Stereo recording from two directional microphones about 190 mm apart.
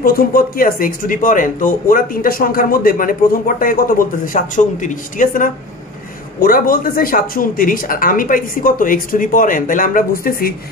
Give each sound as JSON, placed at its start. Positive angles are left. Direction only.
{"t": 0.0, "sound": "speech", "side_deg": 50}